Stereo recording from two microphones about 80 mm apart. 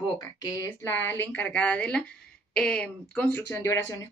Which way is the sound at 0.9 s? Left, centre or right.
Left.